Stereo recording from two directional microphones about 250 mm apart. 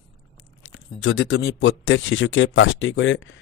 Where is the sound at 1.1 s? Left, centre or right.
Left.